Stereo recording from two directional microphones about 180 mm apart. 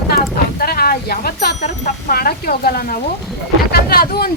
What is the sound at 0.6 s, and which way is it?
Speech, 55° left (ahead or behind).